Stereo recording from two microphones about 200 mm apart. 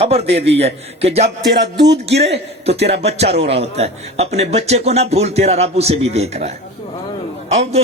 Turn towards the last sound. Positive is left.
turn(degrees=-30)  # may be behind; listen again after turning